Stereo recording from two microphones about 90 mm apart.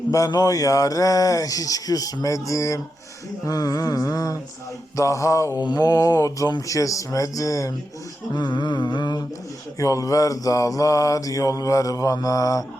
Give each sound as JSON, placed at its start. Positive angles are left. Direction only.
{"t": 0.3, "sound": "mantra", "side_deg": 45}
{"t": 3.4, "sound": "a sound", "side_deg": 45}
{"t": 4.9, "sound": "mantra", "side_deg": 35}
{"t": 5.6, "sound": "a sound", "side_deg": 50}
{"t": 6.7, "sound": "mantra", "side_deg": 40}
{"t": 8.3, "sound": "humming", "side_deg": 55}
{"t": 9.7, "sound": "mantra", "side_deg": 35}